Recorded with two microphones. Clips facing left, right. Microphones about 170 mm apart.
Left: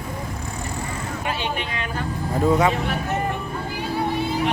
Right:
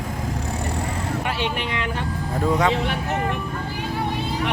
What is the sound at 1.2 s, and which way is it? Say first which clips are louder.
Speech: right 1 dB; 75° right (ahead or behind).